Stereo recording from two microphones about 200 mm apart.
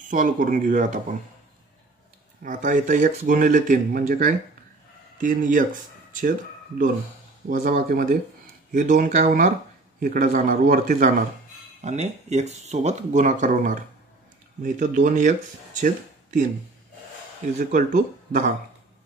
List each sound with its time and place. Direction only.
0.1 s speech: 40° right (ahead or behind)
2.4 s speech: 40° right (ahead or behind)
7.4 s speech: 45° right (ahead or behind)
17.6 s speech: 40° right (ahead or behind)